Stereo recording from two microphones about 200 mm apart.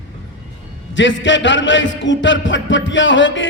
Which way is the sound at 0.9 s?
65° left (ahead or behind).